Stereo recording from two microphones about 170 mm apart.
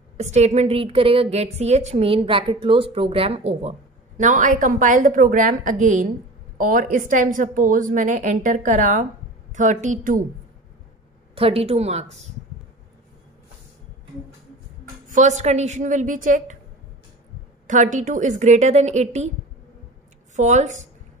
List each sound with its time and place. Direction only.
0.2 s a woman's voice: 40° right (ahead or behind)
4.2 s a woman's voice: 50° right (ahead or behind)
11.3 s a woman's voice: 35° right (ahead or behind)
15.0 s a woman's voice: 45° right (ahead or behind)
17.6 s a woman's voice: 50° right (ahead or behind)
20.3 s a woman's voice: 45° right (ahead or behind)